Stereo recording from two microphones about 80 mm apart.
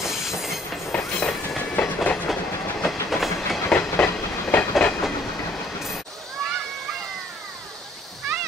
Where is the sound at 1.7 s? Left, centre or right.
Centre.